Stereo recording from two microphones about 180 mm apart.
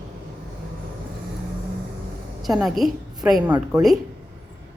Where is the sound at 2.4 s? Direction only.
Centre (ahead or behind).